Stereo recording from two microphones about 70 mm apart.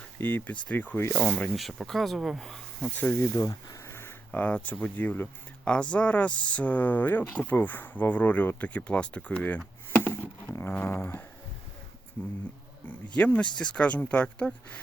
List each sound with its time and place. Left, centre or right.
0.2 s speech: left
1.5 s speech: centre
2.9 s speech: left
3.2 s speech: left
4.3 s speech: centre
5.6 s speech: centre
9.9 s a sound: left
10.6 s speech: left
12.9 s speech: left